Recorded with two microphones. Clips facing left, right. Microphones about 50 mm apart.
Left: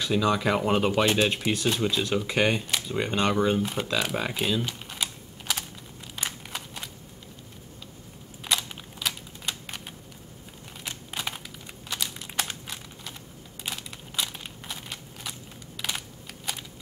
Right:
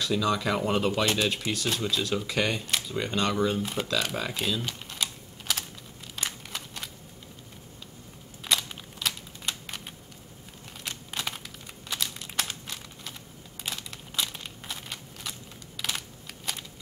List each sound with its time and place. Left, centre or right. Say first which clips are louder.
0.0 s speech: left 2 dB; left
4.0 s speech: left 3 dB; centre
4.6 s typing: left 2 dB; centre
6.1 s a sound: left 1 dB; centre
8.5 s computer keyboard: even; centre
10.8 s a sound: even; centre
13.7 s crushing: left 1 dB; centre
15.8 s computer keyboard: even; centre